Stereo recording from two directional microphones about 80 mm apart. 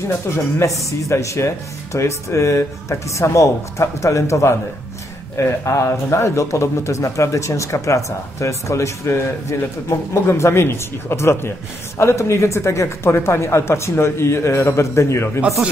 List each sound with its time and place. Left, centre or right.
0.8 s a man's voice: left